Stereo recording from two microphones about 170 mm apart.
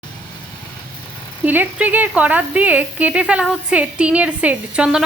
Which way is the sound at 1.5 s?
10° right (ahead or behind).